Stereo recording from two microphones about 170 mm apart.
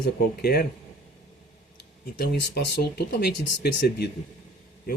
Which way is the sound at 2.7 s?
70° left (ahead or behind).